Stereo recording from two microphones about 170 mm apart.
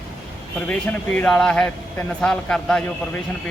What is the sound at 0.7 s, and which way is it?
Speech, 5° left (ahead or behind).